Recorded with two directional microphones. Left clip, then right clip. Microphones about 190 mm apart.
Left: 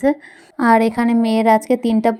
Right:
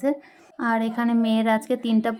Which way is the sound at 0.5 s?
35° left (ahead or behind).